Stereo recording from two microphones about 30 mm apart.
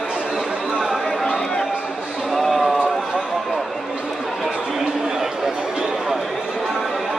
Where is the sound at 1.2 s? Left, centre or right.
Left.